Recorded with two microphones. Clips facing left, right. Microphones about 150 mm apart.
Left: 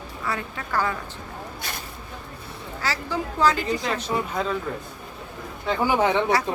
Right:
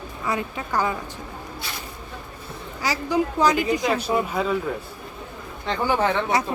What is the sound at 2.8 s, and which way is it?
Speech, 15° right (ahead or behind).